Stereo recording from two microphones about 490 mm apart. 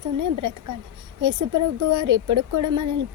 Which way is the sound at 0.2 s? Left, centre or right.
Right.